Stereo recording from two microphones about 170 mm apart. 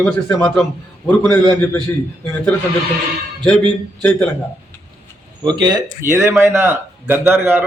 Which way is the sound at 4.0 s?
5° left (ahead or behind).